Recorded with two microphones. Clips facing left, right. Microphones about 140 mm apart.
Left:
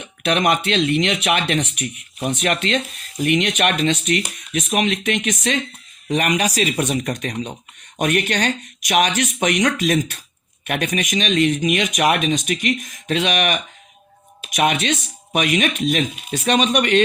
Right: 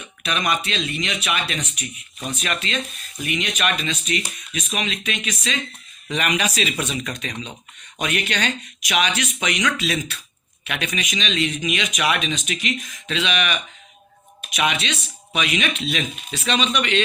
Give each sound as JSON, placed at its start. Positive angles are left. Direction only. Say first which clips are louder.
{"t": 0.0, "sound": "speech", "louder": "left 7 dB", "side_deg": 70}